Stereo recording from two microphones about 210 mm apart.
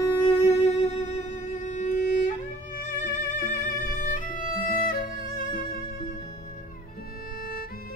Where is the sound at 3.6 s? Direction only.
40° left (ahead or behind).